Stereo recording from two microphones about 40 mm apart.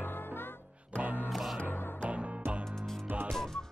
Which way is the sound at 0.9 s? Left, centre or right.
Right.